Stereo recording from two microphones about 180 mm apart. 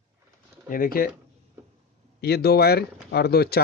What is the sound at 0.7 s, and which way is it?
Speech, 55° left (ahead or behind).